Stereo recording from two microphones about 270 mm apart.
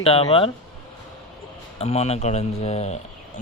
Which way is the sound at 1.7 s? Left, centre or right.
Left.